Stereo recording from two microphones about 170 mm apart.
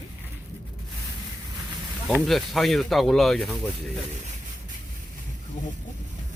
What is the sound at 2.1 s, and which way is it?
Speech, 5° right (ahead or behind).